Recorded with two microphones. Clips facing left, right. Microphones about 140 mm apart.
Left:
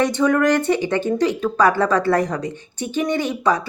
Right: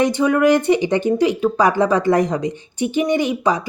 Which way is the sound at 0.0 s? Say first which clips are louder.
Right 2 dB; 15° right (ahead or behind).